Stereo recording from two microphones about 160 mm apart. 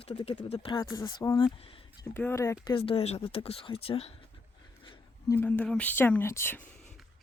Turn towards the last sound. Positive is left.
turn(degrees=15)  # may be behind; listen again after turning